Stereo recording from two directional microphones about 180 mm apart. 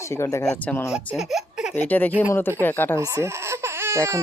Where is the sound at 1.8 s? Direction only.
10° left (ahead or behind).